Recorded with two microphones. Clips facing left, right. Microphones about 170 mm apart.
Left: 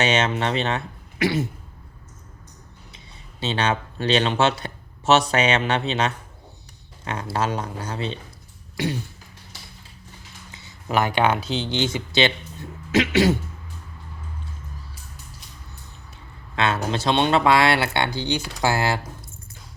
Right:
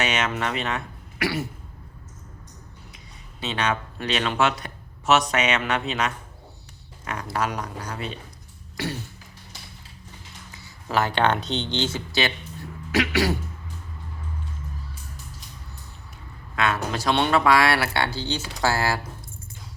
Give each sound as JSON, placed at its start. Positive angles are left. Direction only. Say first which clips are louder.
{"t": 0.0, "sound": "speech", "louder": "left 4 dB", "side_deg": 30}
{"t": 3.4, "sound": "speech", "louder": "left 2 dB", "side_deg": 30}
{"t": 8.7, "sound": "throat clearing", "louder": "left 4 dB", "side_deg": 20}
{"t": 10.5, "sound": "speech", "louder": "left 2 dB", "side_deg": 20}
{"t": 16.6, "sound": "speech", "louder": "left 2 dB", "side_deg": 25}